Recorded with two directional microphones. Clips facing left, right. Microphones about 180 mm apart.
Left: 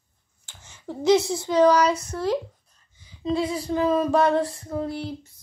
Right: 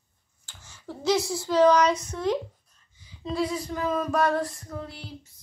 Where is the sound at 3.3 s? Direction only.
30° left (ahead or behind).